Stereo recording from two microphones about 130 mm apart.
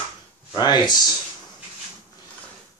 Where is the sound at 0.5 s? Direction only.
35° left (ahead or behind).